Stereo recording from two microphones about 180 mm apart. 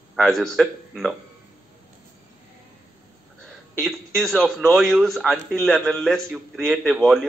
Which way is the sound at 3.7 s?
Centre (ahead or behind).